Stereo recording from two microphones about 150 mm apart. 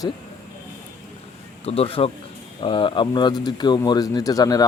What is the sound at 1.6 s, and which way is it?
A man's voice, 40° left (ahead or behind).